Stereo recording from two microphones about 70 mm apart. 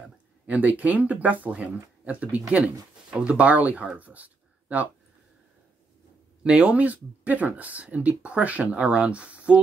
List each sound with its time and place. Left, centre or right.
0.5 s speech: right
6.4 s speech: centre